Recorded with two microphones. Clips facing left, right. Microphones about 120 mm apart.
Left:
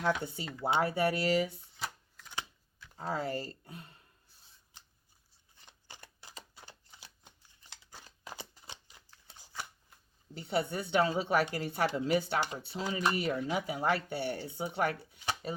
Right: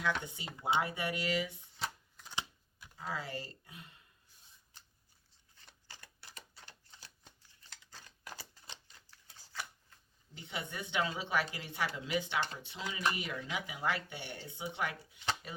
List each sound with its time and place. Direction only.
0.0 s speech: 40° left (ahead or behind)
2.9 s speech: 40° left (ahead or behind)
5.9 s typewriter: 20° left (ahead or behind)
6.9 s shuffling cards: 15° left (ahead or behind)
10.3 s speech: 40° left (ahead or behind)